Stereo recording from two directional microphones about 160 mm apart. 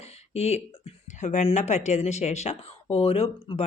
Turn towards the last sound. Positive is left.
turn(degrees=40)  # may be behind; listen again after turning